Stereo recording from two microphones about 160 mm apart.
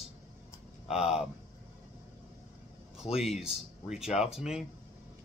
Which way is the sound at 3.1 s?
Centre (ahead or behind).